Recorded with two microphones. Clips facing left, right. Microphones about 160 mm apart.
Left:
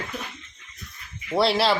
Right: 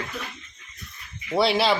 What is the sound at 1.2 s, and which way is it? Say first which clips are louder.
Speech: even; centre (ahead or behind).